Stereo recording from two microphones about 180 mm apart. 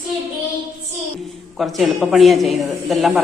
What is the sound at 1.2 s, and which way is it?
A woman's voice, centre (ahead or behind).